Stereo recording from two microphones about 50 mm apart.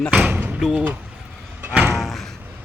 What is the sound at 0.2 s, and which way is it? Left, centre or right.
Slam, right.